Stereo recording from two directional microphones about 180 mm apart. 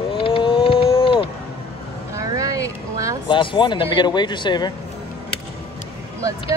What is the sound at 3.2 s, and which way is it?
Speech, 25° left (ahead or behind).